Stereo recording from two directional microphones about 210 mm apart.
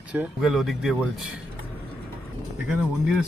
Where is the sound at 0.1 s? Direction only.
5° right (ahead or behind).